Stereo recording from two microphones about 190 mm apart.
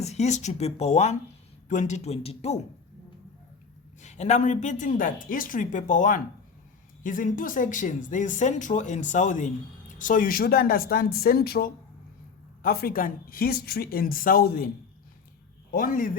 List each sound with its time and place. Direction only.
0.0 s speech: 35° left (ahead or behind)
4.0 s speech: 40° left (ahead or behind)
15.7 s speech: 45° left (ahead or behind)